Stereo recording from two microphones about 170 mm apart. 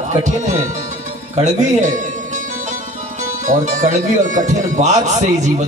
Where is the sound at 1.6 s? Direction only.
45° right (ahead or behind).